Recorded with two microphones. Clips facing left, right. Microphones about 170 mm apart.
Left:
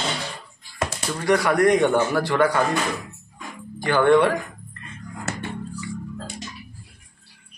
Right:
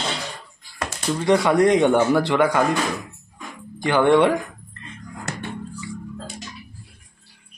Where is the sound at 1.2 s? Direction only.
25° right (ahead or behind).